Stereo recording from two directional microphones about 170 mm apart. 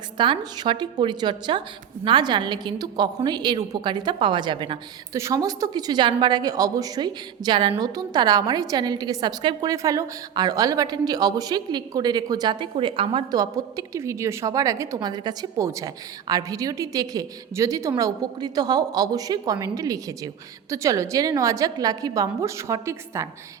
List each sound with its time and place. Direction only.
0.2 s a woman's voice: 25° right (ahead or behind)